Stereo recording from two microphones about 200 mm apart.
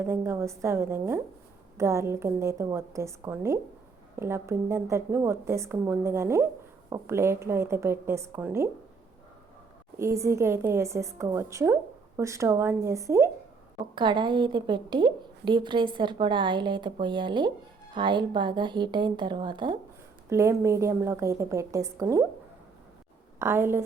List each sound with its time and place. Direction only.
0.0 s a woman's voice: 10° right (ahead or behind)
10.0 s a woman's voice: 15° right (ahead or behind)
23.4 s a woman's voice: 10° right (ahead or behind)